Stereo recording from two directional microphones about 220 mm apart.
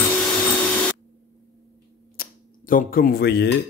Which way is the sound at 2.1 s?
40° left (ahead or behind).